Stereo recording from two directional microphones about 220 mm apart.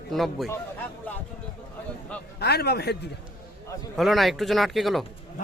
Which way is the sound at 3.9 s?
Centre (ahead or behind).